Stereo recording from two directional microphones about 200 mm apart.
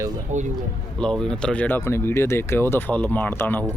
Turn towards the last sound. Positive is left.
turn(degrees=10)  # may be behind; listen again after turning